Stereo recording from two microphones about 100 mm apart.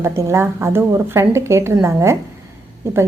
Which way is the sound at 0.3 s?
25° right (ahead or behind).